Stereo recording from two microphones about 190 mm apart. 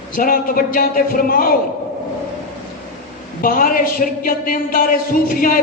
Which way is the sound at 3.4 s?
45° left (ahead or behind).